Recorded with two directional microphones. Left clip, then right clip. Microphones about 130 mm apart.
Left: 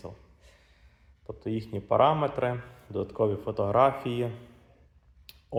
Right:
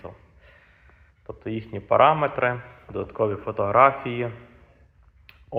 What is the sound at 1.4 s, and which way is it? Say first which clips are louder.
A man's voice: right 2 dB; 45° left (ahead or behind).